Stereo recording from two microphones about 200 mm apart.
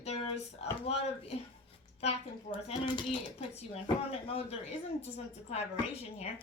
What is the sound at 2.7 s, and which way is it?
Speech, 30° left (ahead or behind).